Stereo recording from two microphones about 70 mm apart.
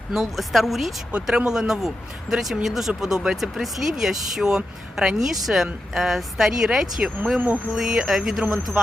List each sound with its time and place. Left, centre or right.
0.1 s speech: centre
1.1 s speech: centre
7.3 s speech: right
7.7 s speech: centre